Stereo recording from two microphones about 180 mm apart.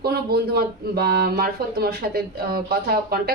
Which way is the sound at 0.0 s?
60° right (ahead or behind).